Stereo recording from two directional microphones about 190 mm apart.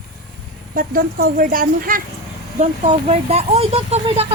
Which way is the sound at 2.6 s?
35° right (ahead or behind).